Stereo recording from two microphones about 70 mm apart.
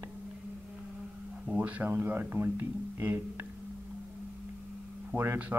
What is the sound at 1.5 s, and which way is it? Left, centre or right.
Speech, centre.